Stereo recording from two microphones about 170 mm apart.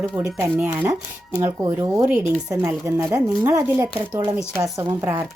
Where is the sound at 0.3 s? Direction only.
15° right (ahead or behind).